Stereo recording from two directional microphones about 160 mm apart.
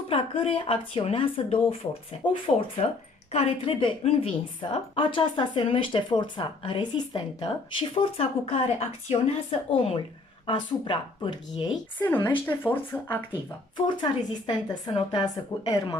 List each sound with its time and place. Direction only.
0.1 s a woman's voice: 40° left (ahead or behind)
12.4 s speech: 10° left (ahead or behind)
14.4 s a woman's voice: 30° left (ahead or behind)